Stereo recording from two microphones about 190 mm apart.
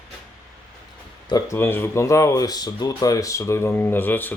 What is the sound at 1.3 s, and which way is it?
Speech, 15° left (ahead or behind).